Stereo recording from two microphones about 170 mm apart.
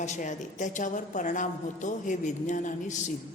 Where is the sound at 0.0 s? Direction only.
45° left (ahead or behind).